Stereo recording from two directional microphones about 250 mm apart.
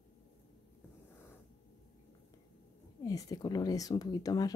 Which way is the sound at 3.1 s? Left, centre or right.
Centre.